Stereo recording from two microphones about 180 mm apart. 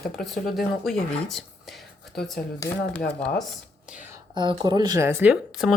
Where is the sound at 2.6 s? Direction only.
20° left (ahead or behind).